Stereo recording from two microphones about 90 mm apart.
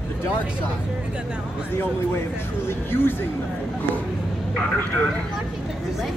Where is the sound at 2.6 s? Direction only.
25° left (ahead or behind).